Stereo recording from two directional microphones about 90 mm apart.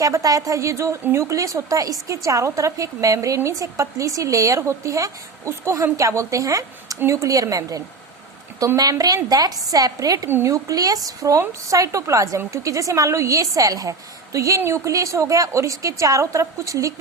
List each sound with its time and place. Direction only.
0.0 s a woman's voice: 40° right (ahead or behind)
10.2 s speech: 25° right (ahead or behind)
10.5 s a woman's voice: 40° right (ahead or behind)